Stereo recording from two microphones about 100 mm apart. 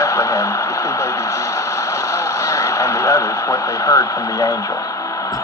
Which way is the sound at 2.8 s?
30° left (ahead or behind).